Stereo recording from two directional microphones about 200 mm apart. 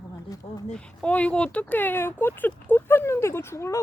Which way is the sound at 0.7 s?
5° left (ahead or behind).